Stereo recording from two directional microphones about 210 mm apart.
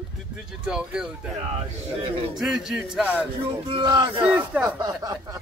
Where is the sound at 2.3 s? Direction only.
Centre (ahead or behind).